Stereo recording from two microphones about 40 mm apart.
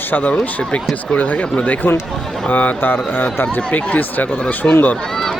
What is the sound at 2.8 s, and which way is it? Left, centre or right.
Speech, left.